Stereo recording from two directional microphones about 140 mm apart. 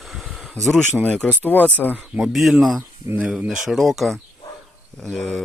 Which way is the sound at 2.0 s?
Centre (ahead or behind).